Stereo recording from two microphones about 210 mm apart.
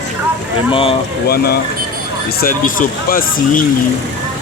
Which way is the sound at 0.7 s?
25° left (ahead or behind).